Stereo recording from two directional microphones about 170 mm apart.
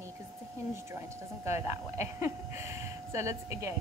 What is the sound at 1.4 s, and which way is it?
Speech, 15° right (ahead or behind).